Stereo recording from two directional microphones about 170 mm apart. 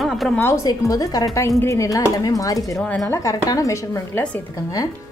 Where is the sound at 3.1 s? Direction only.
20° left (ahead or behind).